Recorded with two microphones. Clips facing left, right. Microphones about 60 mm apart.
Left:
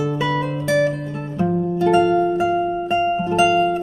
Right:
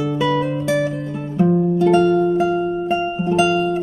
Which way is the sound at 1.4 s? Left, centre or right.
Centre.